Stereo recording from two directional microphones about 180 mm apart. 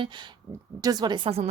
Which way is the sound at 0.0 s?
25° right (ahead or behind).